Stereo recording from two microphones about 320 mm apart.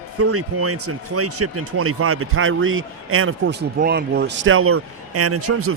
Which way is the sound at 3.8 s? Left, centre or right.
Right.